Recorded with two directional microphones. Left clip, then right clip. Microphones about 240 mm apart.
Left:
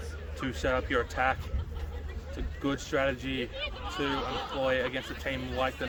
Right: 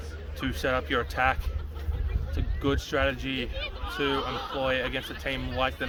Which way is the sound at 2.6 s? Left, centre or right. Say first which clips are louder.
Right 3 dB; right.